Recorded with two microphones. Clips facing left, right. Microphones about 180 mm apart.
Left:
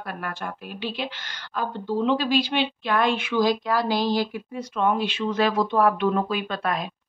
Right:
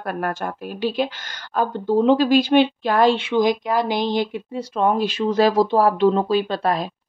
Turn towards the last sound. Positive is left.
turn(degrees=-35)  # may be behind; listen again after turning